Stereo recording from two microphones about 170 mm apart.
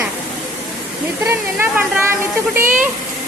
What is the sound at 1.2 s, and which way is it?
Speech, 15° right (ahead or behind).